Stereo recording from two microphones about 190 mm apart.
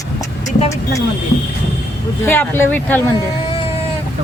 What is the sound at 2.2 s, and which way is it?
Speech, 10° left (ahead or behind).